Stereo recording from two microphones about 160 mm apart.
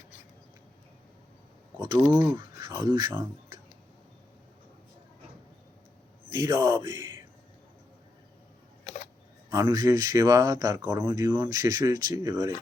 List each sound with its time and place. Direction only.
1.8 s speech: 30° right (ahead or behind)
6.3 s speech: 20° right (ahead or behind)
9.5 s speech: 20° right (ahead or behind)
11.0 s speech: 25° right (ahead or behind)